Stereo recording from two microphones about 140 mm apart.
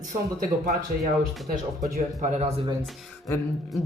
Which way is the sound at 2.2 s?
55° right (ahead or behind).